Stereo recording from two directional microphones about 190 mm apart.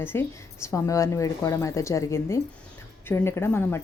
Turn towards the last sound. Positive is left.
turn(degrees=10)  # may be behind; listen again after turning